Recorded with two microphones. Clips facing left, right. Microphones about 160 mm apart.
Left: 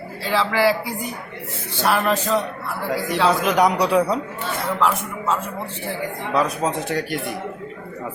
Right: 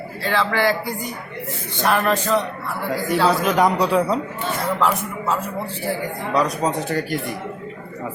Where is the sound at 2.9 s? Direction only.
Centre (ahead or behind).